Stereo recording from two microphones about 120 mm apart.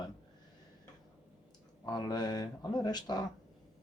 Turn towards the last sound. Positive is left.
turn(degrees=35)  # may be behind; listen again after turning